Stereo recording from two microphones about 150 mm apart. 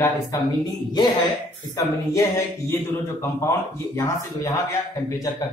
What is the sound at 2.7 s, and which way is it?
Speech, 15° left (ahead or behind).